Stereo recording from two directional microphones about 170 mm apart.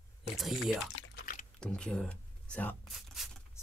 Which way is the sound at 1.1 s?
55° left (ahead or behind).